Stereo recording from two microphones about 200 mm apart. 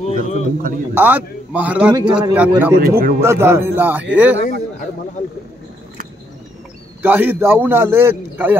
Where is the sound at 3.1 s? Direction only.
10° right (ahead or behind).